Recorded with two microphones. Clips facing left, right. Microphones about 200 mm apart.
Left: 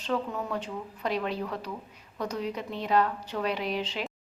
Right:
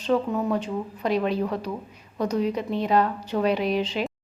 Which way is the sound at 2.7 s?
20° right (ahead or behind).